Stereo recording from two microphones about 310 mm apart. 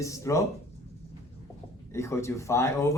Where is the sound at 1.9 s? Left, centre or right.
Centre.